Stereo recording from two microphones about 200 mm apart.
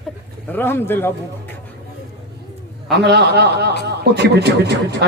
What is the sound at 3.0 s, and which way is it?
Speech, 55° right (ahead or behind).